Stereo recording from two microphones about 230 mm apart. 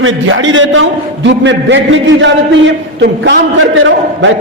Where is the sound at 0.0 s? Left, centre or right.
Right.